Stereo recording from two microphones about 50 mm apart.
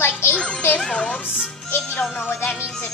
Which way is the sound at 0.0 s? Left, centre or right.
Left.